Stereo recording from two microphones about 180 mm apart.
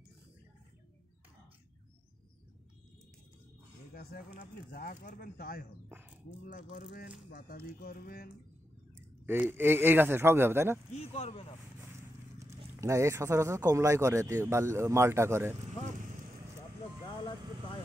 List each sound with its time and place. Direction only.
3.9 s speech: 55° left (ahead or behind)
5.9 s a sound: 10° right (ahead or behind)
6.8 s speech: 45° left (ahead or behind)
9.2 s speech: 10° right (ahead or behind)
10.9 s speech: 35° left (ahead or behind)
12.4 s speech: 15° right (ahead or behind)